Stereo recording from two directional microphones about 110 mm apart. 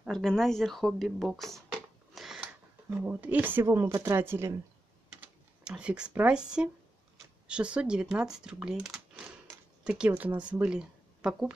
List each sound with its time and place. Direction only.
0.0 s speech: 5° left (ahead or behind)
2.9 s speech: 15° right (ahead or behind)
3.9 s a woman's voice: 30° right (ahead or behind)
5.2 s speech: 10° right (ahead or behind)